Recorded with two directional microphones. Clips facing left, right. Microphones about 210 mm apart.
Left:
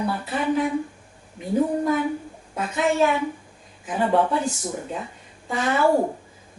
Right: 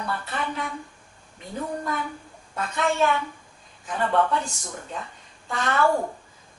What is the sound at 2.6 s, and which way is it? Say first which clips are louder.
Speech: left 3 dB; 5° left (ahead or behind).